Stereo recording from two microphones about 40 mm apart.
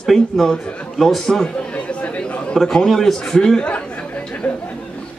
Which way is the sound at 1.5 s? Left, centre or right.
Left.